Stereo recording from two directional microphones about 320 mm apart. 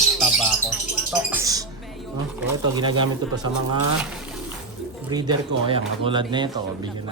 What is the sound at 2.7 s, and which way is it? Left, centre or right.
Speech, centre.